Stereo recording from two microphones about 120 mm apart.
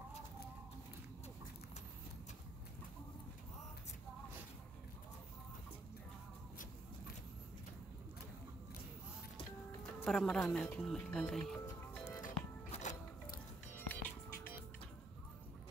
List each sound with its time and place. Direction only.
10.0 s speech: 5° left (ahead or behind)
12.2 s music: 90° left
13.7 s music: 15° left (ahead or behind)